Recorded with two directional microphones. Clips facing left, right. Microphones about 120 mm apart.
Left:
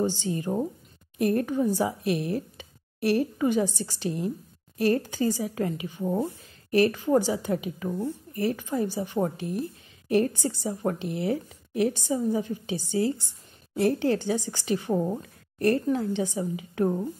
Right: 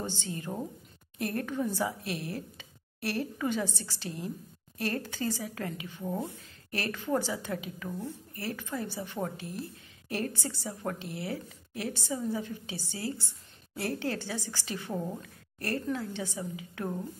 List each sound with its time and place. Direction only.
0.0 s a woman's voice: 15° left (ahead or behind)